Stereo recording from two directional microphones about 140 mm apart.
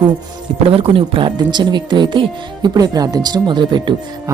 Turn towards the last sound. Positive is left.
turn(degrees=-35)  # may be behind; listen again after turning